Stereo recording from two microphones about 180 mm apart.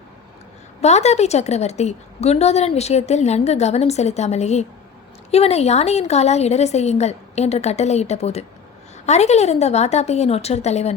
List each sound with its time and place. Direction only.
0.8 s a woman's voice: 40° left (ahead or behind)